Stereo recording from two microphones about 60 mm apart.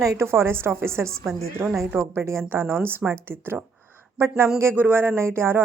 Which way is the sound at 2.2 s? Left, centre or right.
Right.